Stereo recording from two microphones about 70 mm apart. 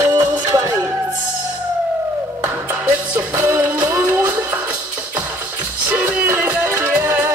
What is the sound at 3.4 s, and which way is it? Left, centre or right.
Music, right.